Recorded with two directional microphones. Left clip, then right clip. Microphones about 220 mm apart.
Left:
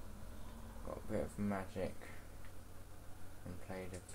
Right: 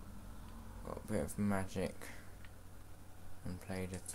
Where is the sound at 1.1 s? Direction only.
50° right (ahead or behind).